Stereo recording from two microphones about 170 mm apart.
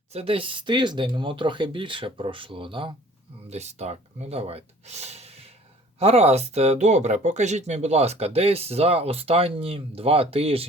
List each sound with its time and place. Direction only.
0.1 s speech: 35° right (ahead or behind)